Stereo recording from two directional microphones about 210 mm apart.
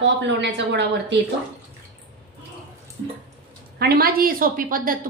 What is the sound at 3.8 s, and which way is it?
A woman's voice, 45° right (ahead or behind).